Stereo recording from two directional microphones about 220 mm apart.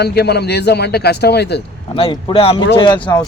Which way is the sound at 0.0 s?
50° left (ahead or behind).